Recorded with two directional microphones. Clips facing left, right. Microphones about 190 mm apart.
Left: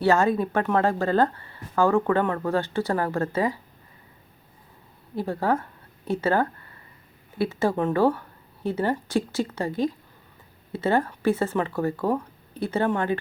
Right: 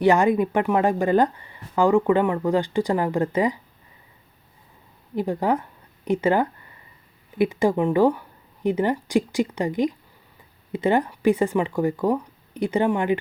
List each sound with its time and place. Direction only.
0.0 s speech: 15° right (ahead or behind)
5.1 s speech: 15° right (ahead or behind)